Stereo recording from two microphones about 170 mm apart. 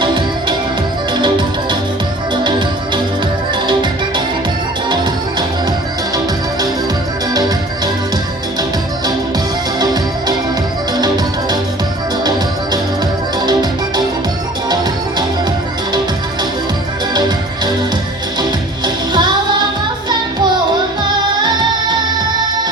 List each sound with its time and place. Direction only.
0.0 s music: 25° right (ahead or behind)
9.7 s music: 25° right (ahead or behind)
13.4 s music: 25° right (ahead or behind)
19.1 s music: 25° right (ahead or behind)